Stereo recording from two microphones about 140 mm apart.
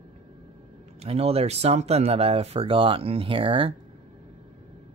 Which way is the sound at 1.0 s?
45° right (ahead or behind).